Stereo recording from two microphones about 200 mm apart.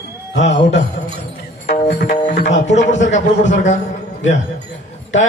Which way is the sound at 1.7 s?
40° left (ahead or behind).